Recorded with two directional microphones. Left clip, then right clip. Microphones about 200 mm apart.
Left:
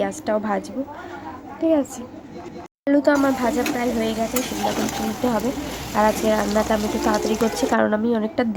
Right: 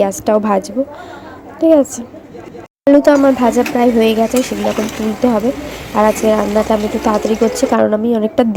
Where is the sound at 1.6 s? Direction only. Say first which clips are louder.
Right 10 dB; 15° right (ahead or behind).